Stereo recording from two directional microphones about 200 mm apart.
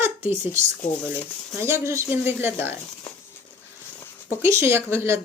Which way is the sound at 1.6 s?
15° right (ahead or behind).